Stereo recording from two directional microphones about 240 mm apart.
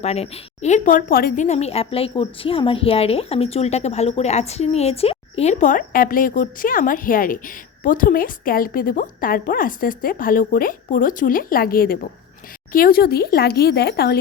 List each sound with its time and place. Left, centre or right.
0.0 s a woman's voice: left